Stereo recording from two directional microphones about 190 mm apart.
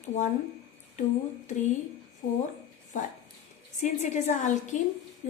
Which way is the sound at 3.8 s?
40° left (ahead or behind).